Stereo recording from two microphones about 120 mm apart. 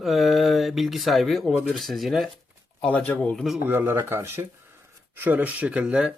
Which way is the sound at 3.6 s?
15° right (ahead or behind).